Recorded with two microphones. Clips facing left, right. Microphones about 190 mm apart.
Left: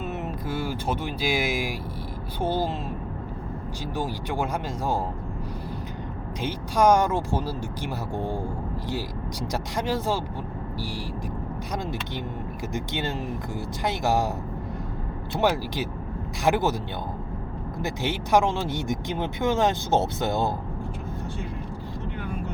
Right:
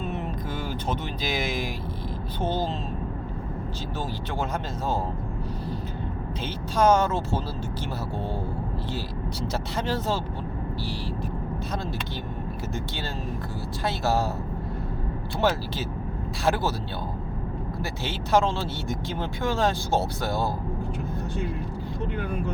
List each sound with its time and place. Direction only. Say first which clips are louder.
0.1 s speech: left 1 dB; 10° left (ahead or behind)
3.9 s speech: left 3 dB; 10° left (ahead or behind)
6.4 s speech: left 1 dB; 15° left (ahead or behind)
9.5 s speech: left 2 dB; 10° left (ahead or behind)
12.7 s speech: left 7 dB; 20° left (ahead or behind)
15.4 s speech: left 1 dB; 15° left (ahead or behind)
17.8 s speech: left 8 dB; 15° left (ahead or behind)